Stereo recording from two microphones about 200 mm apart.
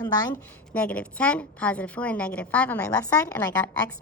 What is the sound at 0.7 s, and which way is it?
A woman's voice, 5° left (ahead or behind).